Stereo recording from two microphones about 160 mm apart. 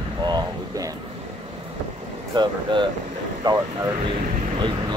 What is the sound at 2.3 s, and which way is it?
Speech, 30° right (ahead or behind).